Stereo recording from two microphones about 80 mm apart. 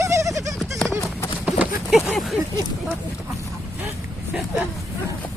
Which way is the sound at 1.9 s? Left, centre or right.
Centre.